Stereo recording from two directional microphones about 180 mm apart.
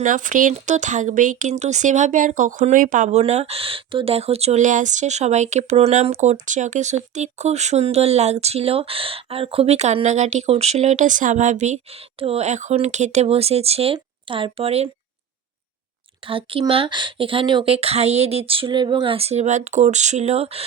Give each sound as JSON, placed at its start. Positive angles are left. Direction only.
{"t": 0.0, "sound": "speech", "side_deg": -45}
{"t": 16.2, "sound": "speech", "side_deg": -30}